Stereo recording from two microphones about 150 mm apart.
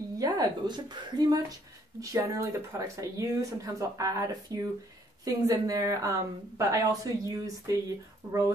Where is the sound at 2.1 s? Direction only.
20° right (ahead or behind).